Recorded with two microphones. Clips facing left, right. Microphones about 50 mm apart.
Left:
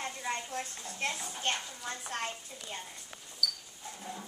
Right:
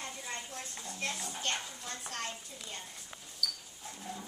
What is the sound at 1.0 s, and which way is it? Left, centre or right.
A woman's voice, left.